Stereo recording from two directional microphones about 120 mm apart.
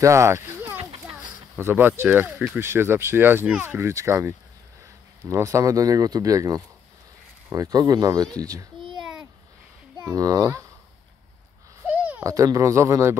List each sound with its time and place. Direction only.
0.0 s speech: 25° right (ahead or behind)
9.9 s speech: 30° right (ahead or behind)
11.9 s a sound: 10° right (ahead or behind)
12.2 s speech: 30° right (ahead or behind)